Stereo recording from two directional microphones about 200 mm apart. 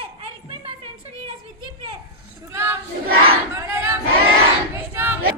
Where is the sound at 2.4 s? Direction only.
10° right (ahead or behind).